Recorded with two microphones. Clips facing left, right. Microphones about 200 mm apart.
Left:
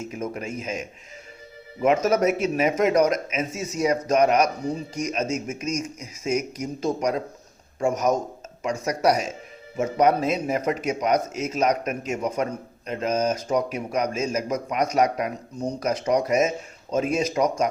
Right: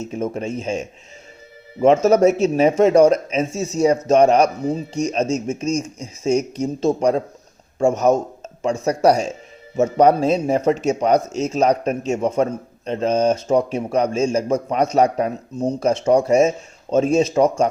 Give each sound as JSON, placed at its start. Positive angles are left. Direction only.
{"t": 0.1, "sound": "speech", "side_deg": -25}